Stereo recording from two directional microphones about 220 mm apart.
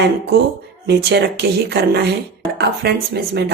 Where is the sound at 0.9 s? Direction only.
50° right (ahead or behind).